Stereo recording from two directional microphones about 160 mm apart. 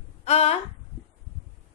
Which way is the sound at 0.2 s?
40° left (ahead or behind).